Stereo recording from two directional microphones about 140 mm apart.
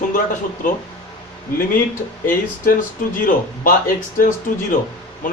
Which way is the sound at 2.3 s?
80° left.